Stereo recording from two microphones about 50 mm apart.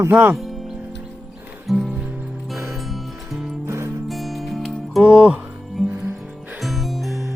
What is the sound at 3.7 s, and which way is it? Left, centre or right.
Music, right.